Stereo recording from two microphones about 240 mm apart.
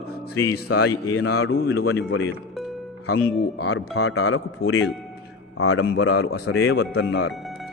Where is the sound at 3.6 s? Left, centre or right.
Left.